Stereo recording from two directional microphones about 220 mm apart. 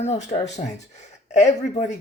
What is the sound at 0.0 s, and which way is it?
Speech, 30° left (ahead or behind).